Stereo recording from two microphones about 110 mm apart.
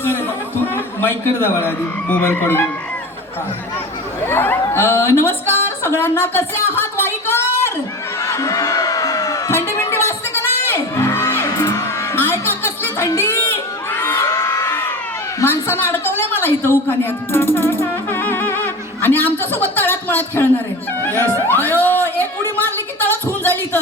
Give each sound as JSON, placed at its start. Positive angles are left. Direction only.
{"t": 0.0, "sound": "a man's voice", "side_deg": 20}
{"t": 4.2, "sound": "a woman's voice", "side_deg": 20}
{"t": 5.6, "sound": "a sound", "side_deg": 20}
{"t": 8.2, "sound": "music", "side_deg": 30}
{"t": 12.1, "sound": "crowd", "side_deg": 20}
{"t": 15.4, "sound": "a man's voice", "side_deg": 20}
{"t": 18.1, "sound": "music", "side_deg": 20}